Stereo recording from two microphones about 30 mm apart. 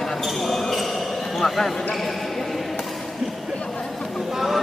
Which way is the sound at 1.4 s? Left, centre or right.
Centre.